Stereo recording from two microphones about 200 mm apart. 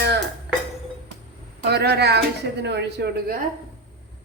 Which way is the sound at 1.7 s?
55° right (ahead or behind).